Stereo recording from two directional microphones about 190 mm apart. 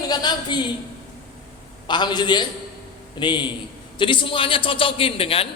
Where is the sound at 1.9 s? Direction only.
25° left (ahead or behind).